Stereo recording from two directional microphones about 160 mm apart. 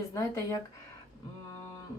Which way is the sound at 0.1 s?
20° left (ahead or behind).